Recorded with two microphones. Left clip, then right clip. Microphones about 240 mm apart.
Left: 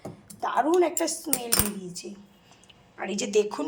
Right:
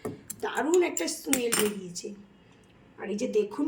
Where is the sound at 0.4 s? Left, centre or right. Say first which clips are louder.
Left 3 dB; centre.